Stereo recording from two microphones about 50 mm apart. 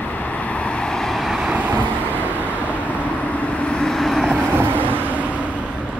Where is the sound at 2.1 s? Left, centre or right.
Right.